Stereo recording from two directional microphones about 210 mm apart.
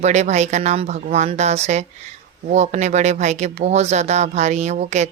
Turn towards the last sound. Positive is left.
turn(degrees=-35)  # may be behind; listen again after turning